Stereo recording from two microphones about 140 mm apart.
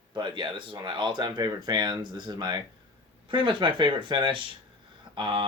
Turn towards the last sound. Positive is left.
turn(degrees=-35)  # may be behind; listen again after turning